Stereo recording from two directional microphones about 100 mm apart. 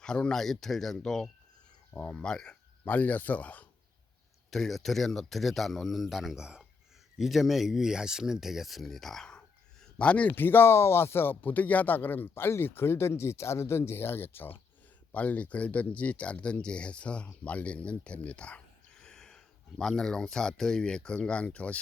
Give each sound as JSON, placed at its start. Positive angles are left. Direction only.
{"t": 0.0, "sound": "speech", "side_deg": 5}
{"t": 1.9, "sound": "speech", "side_deg": 15}
{"t": 4.5, "sound": "speech", "side_deg": 0}